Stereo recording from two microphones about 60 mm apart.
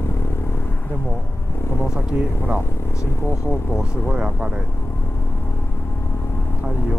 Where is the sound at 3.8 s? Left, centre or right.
Centre.